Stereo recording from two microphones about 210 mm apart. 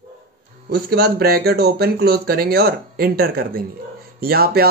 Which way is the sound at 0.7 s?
50° right (ahead or behind).